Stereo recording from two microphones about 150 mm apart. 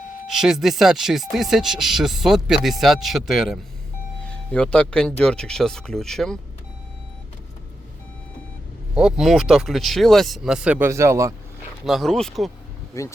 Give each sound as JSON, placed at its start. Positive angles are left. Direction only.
{"t": 0.3, "sound": "speech", "side_deg": -5}
{"t": 9.0, "sound": "speech", "side_deg": -5}
{"t": 11.9, "sound": "speech", "side_deg": 0}
{"t": 12.9, "sound": "speech", "side_deg": 20}